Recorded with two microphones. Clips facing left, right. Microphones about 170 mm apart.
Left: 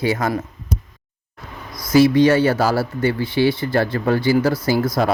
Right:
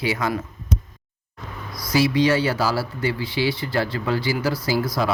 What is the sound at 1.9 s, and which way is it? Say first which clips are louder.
Speech: left 6 dB; 50° left (ahead or behind).